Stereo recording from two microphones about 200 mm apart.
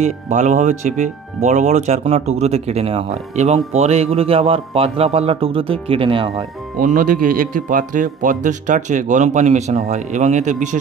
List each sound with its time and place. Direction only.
0.0 s speech: 35° right (ahead or behind)
6.8 s speech: 40° right (ahead or behind)